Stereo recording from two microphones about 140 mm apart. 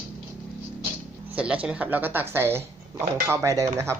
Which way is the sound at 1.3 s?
10° right (ahead or behind).